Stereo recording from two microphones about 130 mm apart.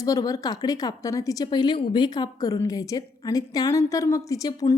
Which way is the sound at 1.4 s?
35° left (ahead or behind).